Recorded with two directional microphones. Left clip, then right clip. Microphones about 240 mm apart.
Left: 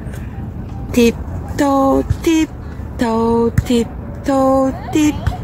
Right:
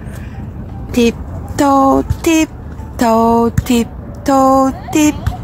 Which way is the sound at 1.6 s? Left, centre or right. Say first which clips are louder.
Right 3 dB; right.